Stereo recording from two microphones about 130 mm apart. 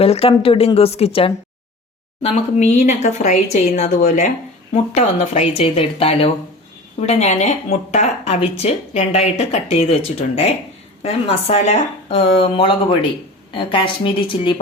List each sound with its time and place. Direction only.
0.0 s a woman's voice: 50° left (ahead or behind)